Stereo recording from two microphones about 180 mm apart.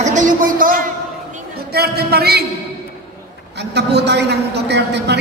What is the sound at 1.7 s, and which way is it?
Speech, 60° right (ahead or behind).